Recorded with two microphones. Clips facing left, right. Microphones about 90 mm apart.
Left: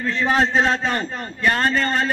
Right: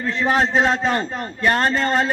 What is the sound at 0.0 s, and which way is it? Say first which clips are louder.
A man's voice: even; 15° right (ahead or behind).